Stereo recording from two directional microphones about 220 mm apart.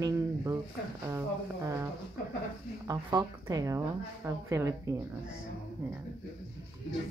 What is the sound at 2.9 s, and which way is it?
Speech, 15° right (ahead or behind).